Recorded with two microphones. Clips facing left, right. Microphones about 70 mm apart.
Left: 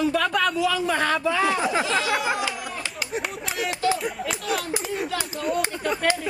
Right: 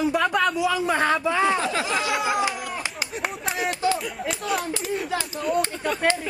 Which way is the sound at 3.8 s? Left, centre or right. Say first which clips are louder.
Even; right.